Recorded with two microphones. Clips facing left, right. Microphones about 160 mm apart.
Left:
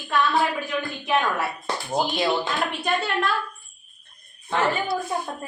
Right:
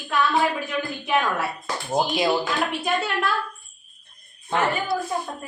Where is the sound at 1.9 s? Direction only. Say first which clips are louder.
Right 2 dB; 5° right (ahead or behind).